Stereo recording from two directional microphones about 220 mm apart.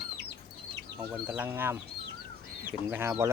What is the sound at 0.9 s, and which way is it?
Speech, 5° right (ahead or behind).